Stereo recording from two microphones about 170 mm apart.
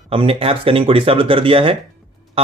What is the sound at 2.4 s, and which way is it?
Music, 35° right (ahead or behind).